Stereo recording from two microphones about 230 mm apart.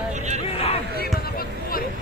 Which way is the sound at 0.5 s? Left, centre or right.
Left.